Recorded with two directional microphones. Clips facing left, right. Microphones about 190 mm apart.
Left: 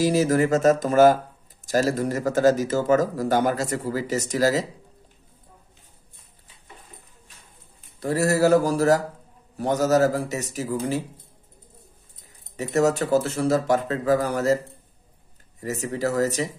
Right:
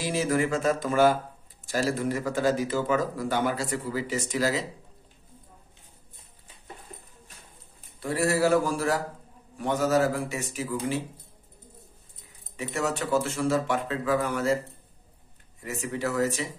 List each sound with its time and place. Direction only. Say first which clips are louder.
0.0 s speech: left 6 dB; 40° left (ahead or behind)
8.0 s speech: left 4 dB; 40° left (ahead or behind)
12.5 s speech: left 8 dB; 40° left (ahead or behind)
15.6 s speech: left 5 dB; 40° left (ahead or behind)